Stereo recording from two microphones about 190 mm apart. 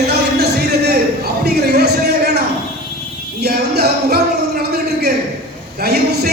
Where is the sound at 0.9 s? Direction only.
60° right (ahead or behind).